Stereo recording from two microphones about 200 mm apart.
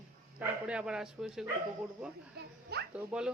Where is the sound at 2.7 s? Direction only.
50° right (ahead or behind).